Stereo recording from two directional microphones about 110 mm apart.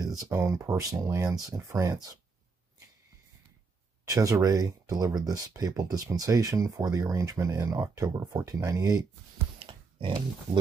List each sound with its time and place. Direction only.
0.0 s a sound: 35° right (ahead or behind)
0.3 s speech: 25° right (ahead or behind)
4.0 s speech: 30° right (ahead or behind)
9.7 s pig: 50° right (ahead or behind)